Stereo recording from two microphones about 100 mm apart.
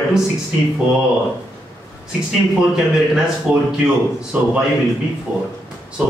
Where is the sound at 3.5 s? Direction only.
5° right (ahead or behind).